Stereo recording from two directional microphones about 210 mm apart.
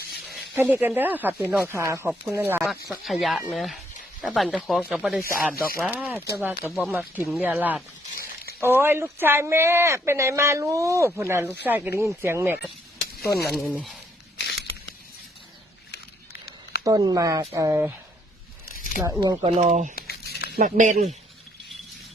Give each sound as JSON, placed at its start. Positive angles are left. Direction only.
{"t": 0.5, "sound": "speech", "side_deg": -10}
{"t": 13.2, "sound": "cutlery", "side_deg": 50}
{"t": 13.5, "sound": "speech", "side_deg": 0}
{"t": 14.3, "sound": "a sound", "side_deg": 55}
{"t": 15.9, "sound": "a sound", "side_deg": 50}
{"t": 16.8, "sound": "speech", "side_deg": -20}
{"t": 19.2, "sound": "speech", "side_deg": -20}
{"t": 20.0, "sound": "crumpling", "side_deg": 50}
{"t": 20.6, "sound": "speech", "side_deg": -35}